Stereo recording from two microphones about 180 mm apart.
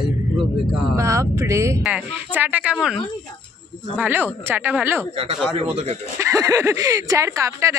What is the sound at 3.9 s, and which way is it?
Speech, 10° right (ahead or behind).